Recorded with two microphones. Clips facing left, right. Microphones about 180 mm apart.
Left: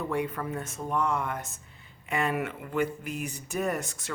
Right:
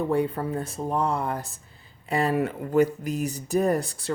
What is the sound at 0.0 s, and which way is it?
Speech, 35° right (ahead or behind).